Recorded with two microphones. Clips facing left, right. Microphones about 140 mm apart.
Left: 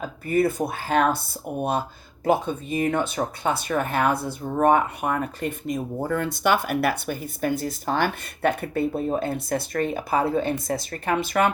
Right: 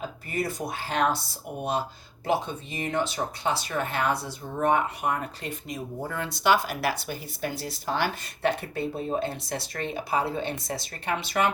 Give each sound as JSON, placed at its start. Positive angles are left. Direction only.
{"t": 0.0, "sound": "speech", "side_deg": 55}